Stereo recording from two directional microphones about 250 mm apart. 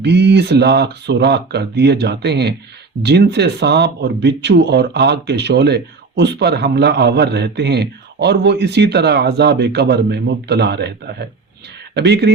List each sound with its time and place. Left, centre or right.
0.0 s speech: right